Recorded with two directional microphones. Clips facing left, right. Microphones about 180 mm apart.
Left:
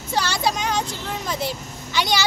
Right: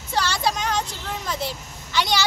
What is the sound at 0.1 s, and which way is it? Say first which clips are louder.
Vehicle: left 1 dB; 5° left (ahead or behind).